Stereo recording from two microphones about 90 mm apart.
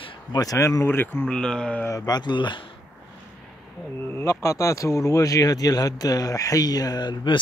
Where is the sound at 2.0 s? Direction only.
55° left (ahead or behind).